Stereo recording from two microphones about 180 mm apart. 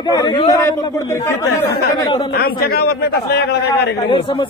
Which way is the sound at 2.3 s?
60° left (ahead or behind).